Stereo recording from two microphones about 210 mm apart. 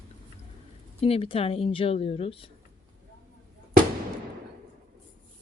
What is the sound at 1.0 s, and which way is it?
A woman's voice, 25° left (ahead or behind).